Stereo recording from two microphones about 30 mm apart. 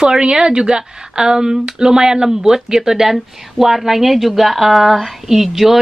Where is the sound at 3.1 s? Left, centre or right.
Centre.